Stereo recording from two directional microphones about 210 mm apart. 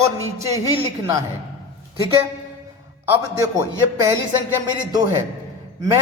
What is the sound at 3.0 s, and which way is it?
A man's voice, 15° right (ahead or behind).